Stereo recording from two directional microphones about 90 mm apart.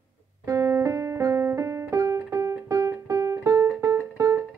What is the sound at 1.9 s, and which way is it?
Music, 35° right (ahead or behind).